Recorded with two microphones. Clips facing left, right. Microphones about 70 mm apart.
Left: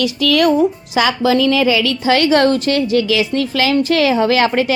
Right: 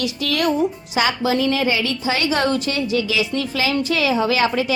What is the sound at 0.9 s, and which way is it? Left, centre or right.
A woman's voice, left.